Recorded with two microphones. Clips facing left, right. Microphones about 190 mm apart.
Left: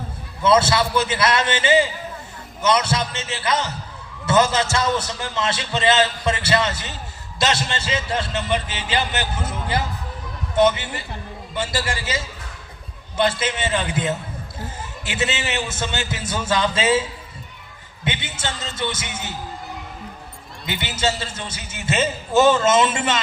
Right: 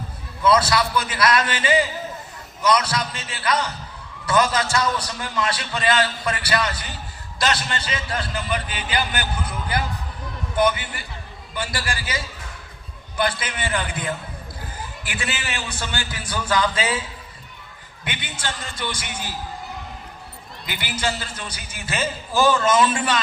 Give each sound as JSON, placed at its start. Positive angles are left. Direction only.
{"t": 0.4, "sound": "a man's voice", "side_deg": 25}
{"t": 18.0, "sound": "a man's voice", "side_deg": 25}
{"t": 20.7, "sound": "a man's voice", "side_deg": 25}